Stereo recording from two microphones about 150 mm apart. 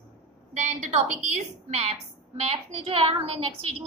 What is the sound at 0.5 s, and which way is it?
A woman's voice, 55° right (ahead or behind).